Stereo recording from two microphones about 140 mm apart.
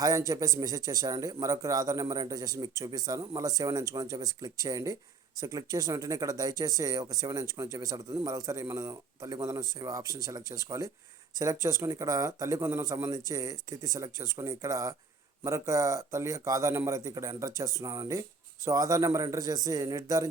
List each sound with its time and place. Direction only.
0.0 s a man's voice: 25° right (ahead or behind)